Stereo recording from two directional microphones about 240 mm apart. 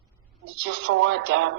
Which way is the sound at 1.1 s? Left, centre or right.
Right.